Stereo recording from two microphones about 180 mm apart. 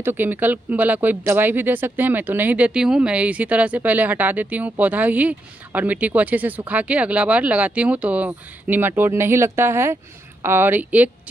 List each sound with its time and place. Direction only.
0.0 s speech: 10° right (ahead or behind)